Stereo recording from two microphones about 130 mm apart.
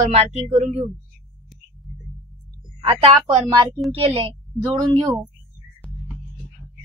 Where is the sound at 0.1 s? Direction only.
55° right (ahead or behind).